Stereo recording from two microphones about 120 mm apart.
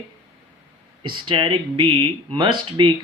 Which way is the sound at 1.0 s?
40° right (ahead or behind).